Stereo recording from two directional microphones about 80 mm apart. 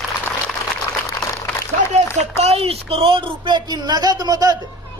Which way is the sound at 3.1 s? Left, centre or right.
Right.